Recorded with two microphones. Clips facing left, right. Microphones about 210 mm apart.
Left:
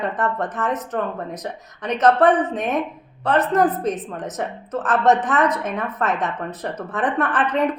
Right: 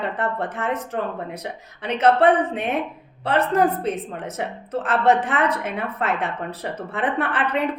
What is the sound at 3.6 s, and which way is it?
Speech, 10° right (ahead or behind).